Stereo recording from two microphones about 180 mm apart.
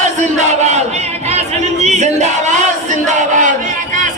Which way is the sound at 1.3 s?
40° right (ahead or behind).